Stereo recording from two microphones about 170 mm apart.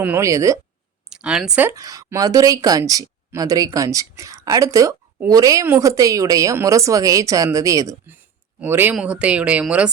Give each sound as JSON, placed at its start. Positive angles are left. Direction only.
{"t": 0.0, "sound": "speech", "side_deg": -15}
{"t": 1.1, "sound": "a woman's voice", "side_deg": -5}